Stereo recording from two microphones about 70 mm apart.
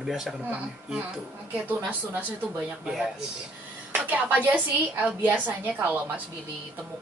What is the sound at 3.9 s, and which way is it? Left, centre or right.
A woman's voice, right.